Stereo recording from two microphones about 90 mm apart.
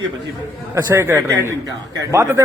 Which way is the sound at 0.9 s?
30° right (ahead or behind).